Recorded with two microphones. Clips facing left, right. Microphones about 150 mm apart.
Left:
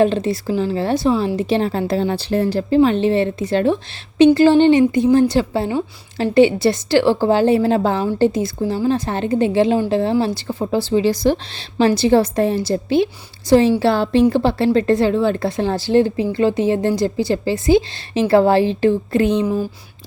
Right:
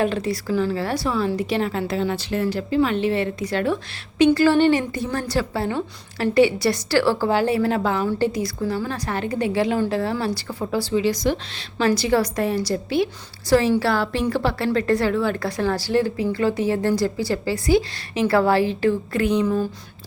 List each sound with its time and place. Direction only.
0.0 s a woman's voice: 25° left (ahead or behind)